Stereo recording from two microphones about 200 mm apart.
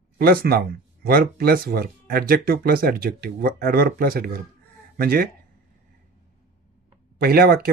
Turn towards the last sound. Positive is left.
turn(degrees=-50)  # may be behind; listen again after turning